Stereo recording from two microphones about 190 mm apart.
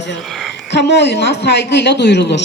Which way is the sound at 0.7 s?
65° left (ahead or behind).